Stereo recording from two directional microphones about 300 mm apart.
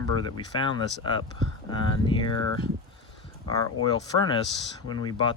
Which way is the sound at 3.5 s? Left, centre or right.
Centre.